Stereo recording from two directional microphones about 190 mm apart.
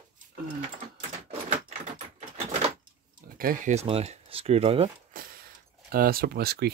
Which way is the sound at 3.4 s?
45° right (ahead or behind).